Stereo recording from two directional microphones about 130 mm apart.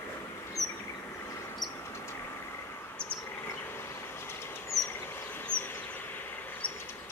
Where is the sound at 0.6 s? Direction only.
25° left (ahead or behind).